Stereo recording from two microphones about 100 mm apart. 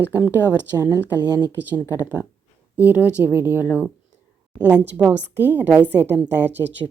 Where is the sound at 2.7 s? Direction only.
15° right (ahead or behind).